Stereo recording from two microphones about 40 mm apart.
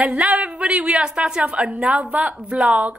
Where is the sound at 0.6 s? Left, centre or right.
Right.